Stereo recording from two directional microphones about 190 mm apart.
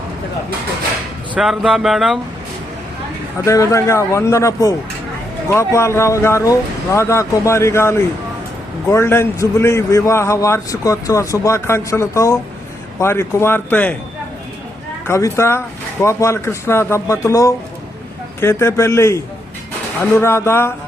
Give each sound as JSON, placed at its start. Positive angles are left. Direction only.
{"t": 1.3, "sound": "speech", "side_deg": -5}
{"t": 3.4, "sound": "a man's voice", "side_deg": 15}
{"t": 15.0, "sound": "a man's voice", "side_deg": 15}